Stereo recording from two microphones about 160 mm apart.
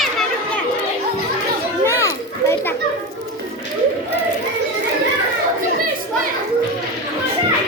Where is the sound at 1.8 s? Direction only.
20° left (ahead or behind).